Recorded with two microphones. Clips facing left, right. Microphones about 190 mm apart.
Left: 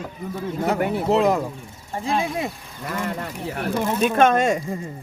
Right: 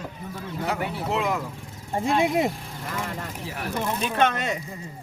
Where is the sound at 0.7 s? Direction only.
50° left (ahead or behind).